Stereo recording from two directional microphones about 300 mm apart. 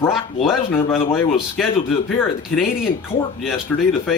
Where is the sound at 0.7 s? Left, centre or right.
Centre.